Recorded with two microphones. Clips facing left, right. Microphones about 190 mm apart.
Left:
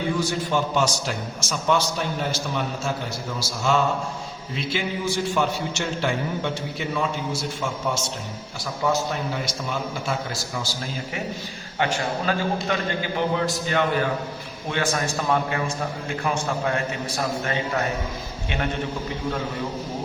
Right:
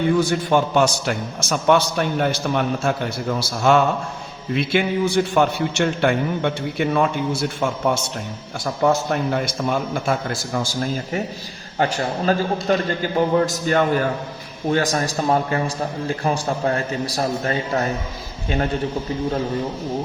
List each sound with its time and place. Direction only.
0.2 s a man's voice: 60° right (ahead or behind)
8.6 s a man's voice: 55° right (ahead or behind)
11.8 s a man's voice: 40° right (ahead or behind)